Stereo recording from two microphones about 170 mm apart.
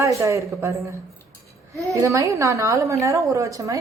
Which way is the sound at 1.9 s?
20° right (ahead or behind).